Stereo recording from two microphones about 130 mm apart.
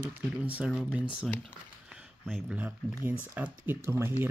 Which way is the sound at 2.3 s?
10° right (ahead or behind).